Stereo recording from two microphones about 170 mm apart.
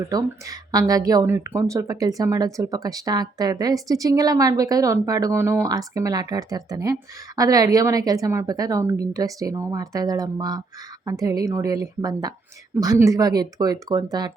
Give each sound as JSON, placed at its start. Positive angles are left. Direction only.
{"t": 0.1, "sound": "speech", "side_deg": -20}